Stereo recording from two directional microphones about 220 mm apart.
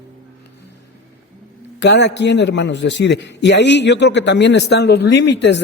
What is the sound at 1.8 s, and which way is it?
A man's voice, 50° left (ahead or behind).